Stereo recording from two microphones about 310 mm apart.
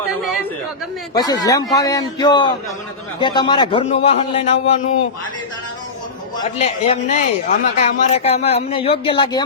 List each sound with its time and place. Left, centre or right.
0.2 s chatter: centre
1.1 s a man's voice: centre
6.6 s speech: left